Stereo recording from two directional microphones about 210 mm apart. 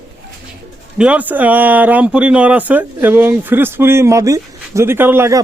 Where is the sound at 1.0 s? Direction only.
5° right (ahead or behind).